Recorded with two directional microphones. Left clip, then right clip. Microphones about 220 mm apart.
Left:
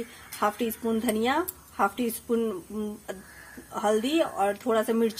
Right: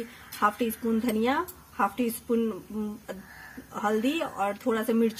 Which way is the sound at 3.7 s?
15° left (ahead or behind).